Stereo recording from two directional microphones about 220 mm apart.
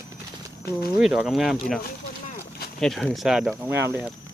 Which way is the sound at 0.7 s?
45° left (ahead or behind).